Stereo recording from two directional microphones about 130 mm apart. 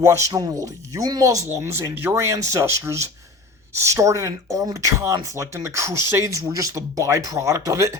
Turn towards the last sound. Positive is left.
turn(degrees=-25)  # may be behind; listen again after turning